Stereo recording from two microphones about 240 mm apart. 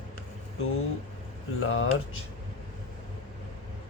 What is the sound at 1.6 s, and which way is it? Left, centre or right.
Speech, left.